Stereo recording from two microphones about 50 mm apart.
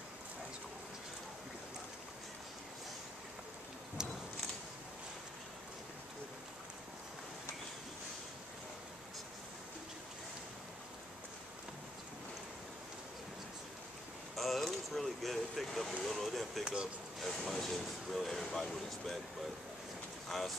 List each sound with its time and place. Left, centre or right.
4.0 s a sound: centre
14.3 s speech: centre
16.6 s speech: centre
17.2 s speech: centre
20.2 s speech: centre